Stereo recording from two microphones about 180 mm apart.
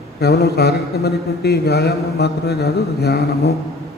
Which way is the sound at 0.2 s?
65° left (ahead or behind).